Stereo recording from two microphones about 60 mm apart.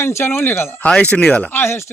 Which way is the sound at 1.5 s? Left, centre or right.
Left.